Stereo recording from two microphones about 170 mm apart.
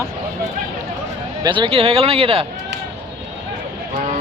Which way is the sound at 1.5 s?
30° right (ahead or behind).